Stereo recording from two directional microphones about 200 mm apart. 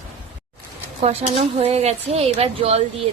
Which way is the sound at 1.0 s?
30° right (ahead or behind).